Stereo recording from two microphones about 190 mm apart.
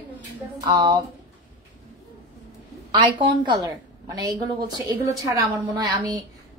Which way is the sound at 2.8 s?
25° right (ahead or behind).